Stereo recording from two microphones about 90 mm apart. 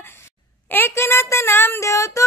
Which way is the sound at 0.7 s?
25° left (ahead or behind).